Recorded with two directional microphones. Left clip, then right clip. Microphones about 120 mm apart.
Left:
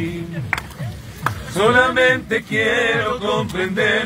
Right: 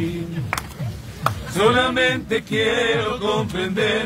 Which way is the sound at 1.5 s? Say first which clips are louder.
Left 3 dB; 5° left (ahead or behind).